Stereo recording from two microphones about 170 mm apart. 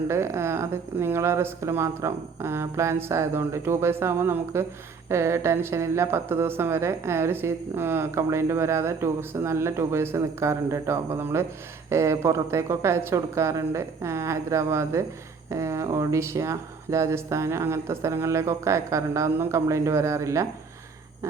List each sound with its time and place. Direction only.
0.1 s speech: 15° right (ahead or behind)